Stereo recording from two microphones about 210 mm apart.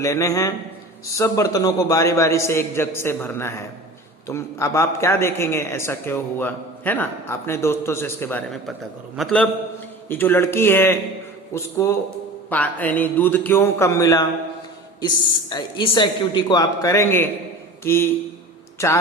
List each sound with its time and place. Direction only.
0.0 s a man's voice: 15° left (ahead or behind)